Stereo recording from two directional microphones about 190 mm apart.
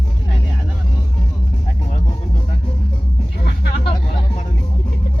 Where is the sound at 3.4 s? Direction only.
55° left (ahead or behind).